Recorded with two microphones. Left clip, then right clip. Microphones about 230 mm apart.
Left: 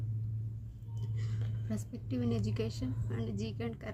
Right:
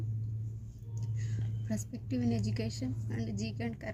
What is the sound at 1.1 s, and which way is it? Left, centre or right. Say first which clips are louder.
A woman's voice: even; centre.